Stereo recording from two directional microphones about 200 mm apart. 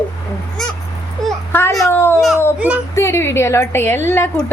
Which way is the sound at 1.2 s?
5° left (ahead or behind).